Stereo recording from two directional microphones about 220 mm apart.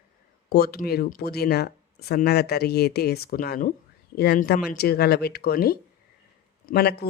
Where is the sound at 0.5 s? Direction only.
45° left (ahead or behind).